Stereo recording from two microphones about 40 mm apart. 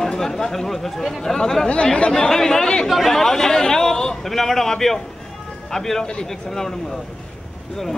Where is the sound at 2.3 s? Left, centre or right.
Centre.